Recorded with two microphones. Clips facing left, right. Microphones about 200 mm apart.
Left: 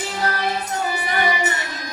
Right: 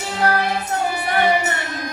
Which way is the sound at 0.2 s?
60° right (ahead or behind).